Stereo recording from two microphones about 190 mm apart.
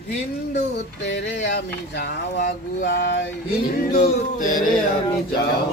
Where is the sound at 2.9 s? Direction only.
65° left (ahead or behind).